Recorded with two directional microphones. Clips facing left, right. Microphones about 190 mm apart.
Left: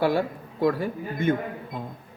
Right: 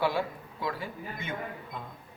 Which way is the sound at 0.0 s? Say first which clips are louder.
Left 6 dB; 45° left (ahead or behind).